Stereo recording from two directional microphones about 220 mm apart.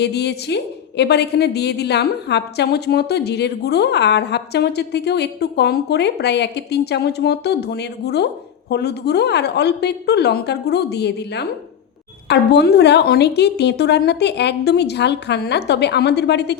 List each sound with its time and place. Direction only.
0.0 s a woman's voice: 50° left (ahead or behind)